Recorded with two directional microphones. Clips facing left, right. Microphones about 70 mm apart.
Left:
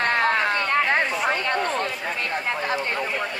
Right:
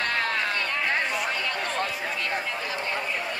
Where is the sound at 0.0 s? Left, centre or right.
Left.